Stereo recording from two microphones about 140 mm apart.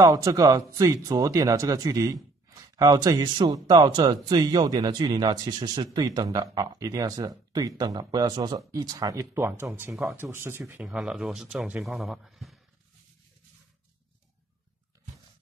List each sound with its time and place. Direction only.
0.0 s speech: 25° right (ahead or behind)
10.7 s speech: 5° right (ahead or behind)